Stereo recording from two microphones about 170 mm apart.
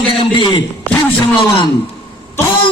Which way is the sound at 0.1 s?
30° left (ahead or behind).